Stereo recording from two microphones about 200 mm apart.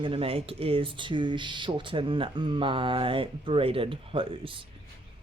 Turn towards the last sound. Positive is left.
turn(degrees=-25)  # may be behind; listen again after turning